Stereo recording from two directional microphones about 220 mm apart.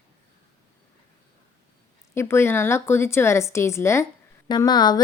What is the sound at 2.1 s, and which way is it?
Speech, 10° left (ahead or behind).